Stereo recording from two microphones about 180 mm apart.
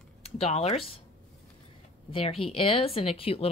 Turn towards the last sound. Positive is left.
turn(degrees=30)  # may be behind; listen again after turning